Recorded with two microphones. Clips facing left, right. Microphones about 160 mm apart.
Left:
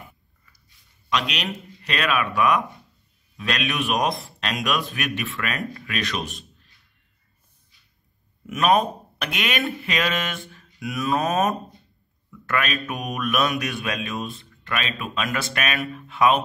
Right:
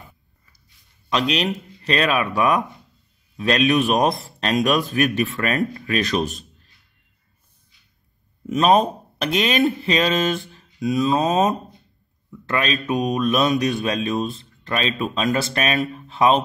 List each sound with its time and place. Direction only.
1.1 s a man's voice: 35° right (ahead or behind)
8.5 s a man's voice: 30° right (ahead or behind)